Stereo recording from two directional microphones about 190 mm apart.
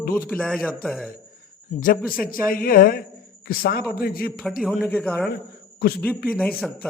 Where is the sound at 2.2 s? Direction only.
45° left (ahead or behind).